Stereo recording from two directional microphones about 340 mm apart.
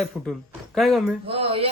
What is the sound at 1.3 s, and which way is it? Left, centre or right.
Speech, centre.